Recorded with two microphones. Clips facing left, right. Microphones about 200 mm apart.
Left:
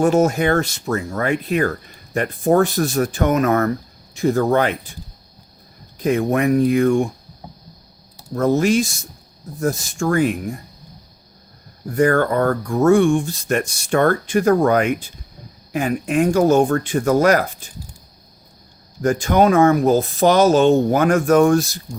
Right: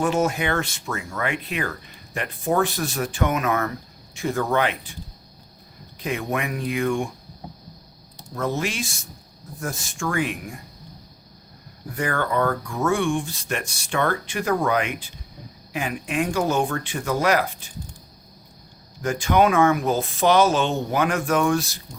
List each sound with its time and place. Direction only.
0.0 s speech: 45° left (ahead or behind)
6.0 s speech: 45° left (ahead or behind)
8.4 s speech: 45° left (ahead or behind)
11.9 s speech: 45° left (ahead or behind)
19.0 s speech: 45° left (ahead or behind)